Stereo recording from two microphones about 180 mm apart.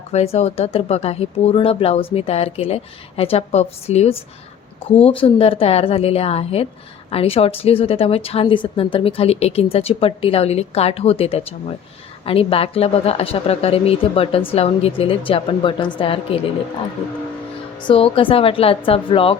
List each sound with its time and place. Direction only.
0.1 s speech: 35° left (ahead or behind)
17.8 s speech: 30° left (ahead or behind)